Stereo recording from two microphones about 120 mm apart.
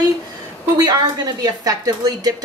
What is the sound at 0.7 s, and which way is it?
Speech, 30° right (ahead or behind).